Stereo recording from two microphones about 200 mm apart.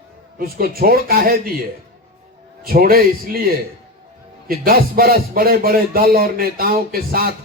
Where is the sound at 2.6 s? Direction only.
50° right (ahead or behind).